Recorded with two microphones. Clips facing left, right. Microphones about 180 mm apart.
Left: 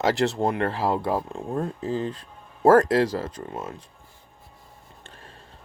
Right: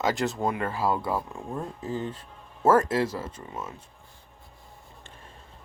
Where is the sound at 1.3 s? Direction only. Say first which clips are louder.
Left 6 dB; 80° left.